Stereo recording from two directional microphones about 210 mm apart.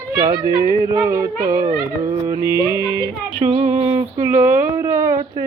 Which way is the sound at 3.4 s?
35° right (ahead or behind).